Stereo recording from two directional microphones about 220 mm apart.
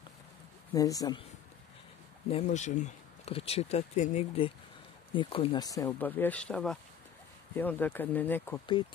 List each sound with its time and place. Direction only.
0.7 s speech: 15° left (ahead or behind)
2.2 s speech: 30° left (ahead or behind); by 8.5 s 10° left (ahead or behind)